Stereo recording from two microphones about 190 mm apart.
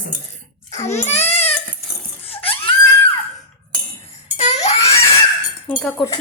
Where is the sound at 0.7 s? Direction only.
35° left (ahead or behind).